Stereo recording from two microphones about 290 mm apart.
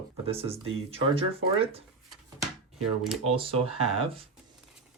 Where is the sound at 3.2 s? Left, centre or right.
Centre.